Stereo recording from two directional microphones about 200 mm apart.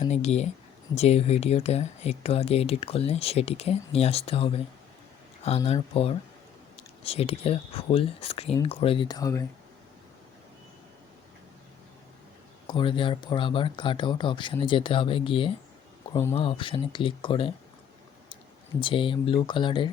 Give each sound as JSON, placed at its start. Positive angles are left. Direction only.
{"t": 0.0, "sound": "speech", "side_deg": 35}
{"t": 12.6, "sound": "speech", "side_deg": 25}
{"t": 18.8, "sound": "speech", "side_deg": 25}